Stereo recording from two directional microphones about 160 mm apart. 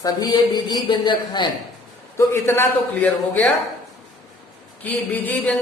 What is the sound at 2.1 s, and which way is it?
A man's voice, 15° left (ahead or behind).